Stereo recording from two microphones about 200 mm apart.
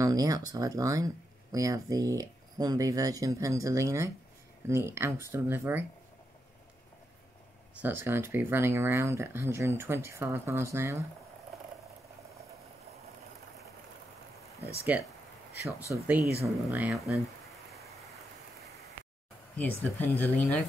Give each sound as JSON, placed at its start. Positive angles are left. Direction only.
{"t": 0.0, "sound": "speech", "side_deg": -20}
{"t": 7.8, "sound": "speech", "side_deg": -10}
{"t": 14.9, "sound": "speech", "side_deg": -5}
{"t": 19.5, "sound": "speech", "side_deg": 10}